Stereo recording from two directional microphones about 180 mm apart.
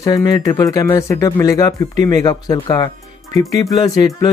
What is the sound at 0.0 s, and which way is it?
Speech, 20° left (ahead or behind).